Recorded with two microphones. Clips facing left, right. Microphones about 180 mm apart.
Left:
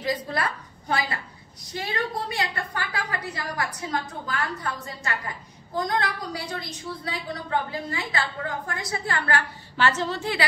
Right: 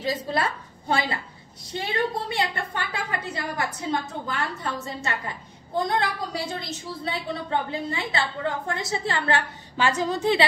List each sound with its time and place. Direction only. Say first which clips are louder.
0.0 s a woman's voice: right 1 dB; 25° right (ahead or behind)